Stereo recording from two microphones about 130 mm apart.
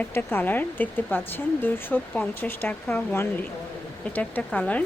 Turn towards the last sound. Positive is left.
turn(degrees=10)  # may be behind; listen again after turning